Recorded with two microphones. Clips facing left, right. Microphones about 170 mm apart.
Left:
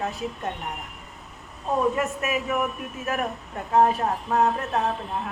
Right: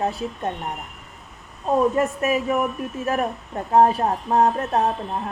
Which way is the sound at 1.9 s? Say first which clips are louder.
Right 5 dB; 35° right (ahead or behind).